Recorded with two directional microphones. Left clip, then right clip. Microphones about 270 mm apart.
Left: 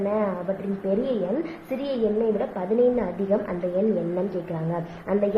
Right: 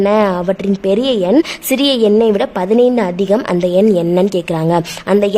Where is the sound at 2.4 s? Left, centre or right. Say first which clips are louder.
Right 10 dB; right.